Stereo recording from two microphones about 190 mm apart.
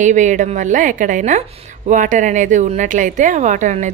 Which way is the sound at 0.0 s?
40° right (ahead or behind).